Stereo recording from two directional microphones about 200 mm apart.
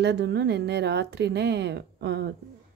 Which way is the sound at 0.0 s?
60° right (ahead or behind).